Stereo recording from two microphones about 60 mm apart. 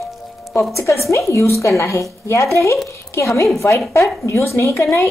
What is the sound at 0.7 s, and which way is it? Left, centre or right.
Speech, left.